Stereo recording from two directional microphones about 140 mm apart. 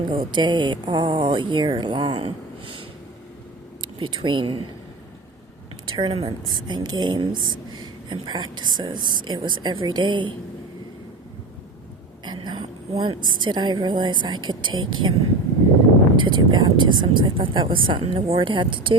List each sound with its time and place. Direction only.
0.1 s a woman's voice: 35° right (ahead or behind)
2.0 s speech: 45° right (ahead or behind)
5.8 s a woman's voice: 35° right (ahead or behind)
12.2 s a woman's voice: 30° right (ahead or behind)
16.1 s a woman's voice: 35° right (ahead or behind)